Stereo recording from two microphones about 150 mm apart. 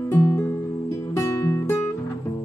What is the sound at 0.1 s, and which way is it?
Music, 15° left (ahead or behind).